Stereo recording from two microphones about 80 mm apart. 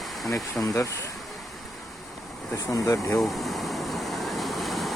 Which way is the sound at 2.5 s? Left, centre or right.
Left.